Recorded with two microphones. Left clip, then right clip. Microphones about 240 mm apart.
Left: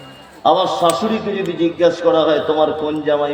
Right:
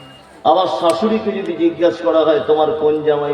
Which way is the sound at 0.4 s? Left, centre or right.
Left.